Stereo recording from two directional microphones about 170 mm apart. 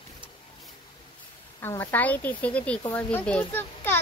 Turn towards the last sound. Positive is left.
turn(degrees=10)  # may be behind; listen again after turning